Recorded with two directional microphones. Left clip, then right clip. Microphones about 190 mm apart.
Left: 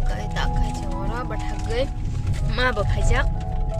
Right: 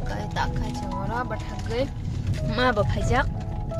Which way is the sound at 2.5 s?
15° right (ahead or behind).